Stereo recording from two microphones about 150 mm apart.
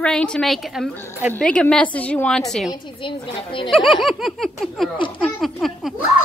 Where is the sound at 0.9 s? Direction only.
15° right (ahead or behind).